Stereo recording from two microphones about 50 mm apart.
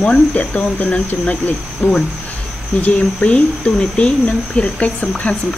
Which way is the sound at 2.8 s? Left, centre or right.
Left.